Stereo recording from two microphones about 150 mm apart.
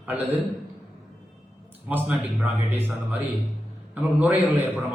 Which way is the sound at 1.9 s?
10° right (ahead or behind).